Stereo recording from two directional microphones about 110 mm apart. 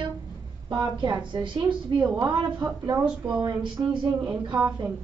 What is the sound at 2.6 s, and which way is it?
Speech, 30° right (ahead or behind).